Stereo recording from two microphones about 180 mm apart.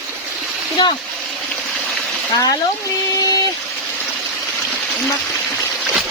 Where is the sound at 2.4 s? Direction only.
20° left (ahead or behind).